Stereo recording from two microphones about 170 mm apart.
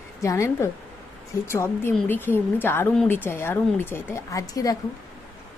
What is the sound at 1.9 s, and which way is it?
A woman's voice, centre (ahead or behind).